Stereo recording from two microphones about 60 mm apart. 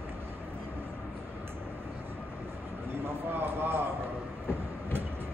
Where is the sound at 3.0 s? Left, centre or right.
Right.